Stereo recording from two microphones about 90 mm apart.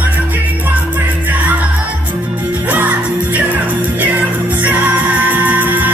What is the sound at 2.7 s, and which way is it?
Music, 20° right (ahead or behind).